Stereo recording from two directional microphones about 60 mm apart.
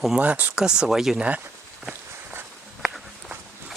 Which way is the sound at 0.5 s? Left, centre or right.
Centre.